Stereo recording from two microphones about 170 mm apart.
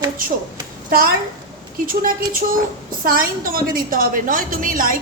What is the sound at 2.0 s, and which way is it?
A woman's voice, 55° right (ahead or behind).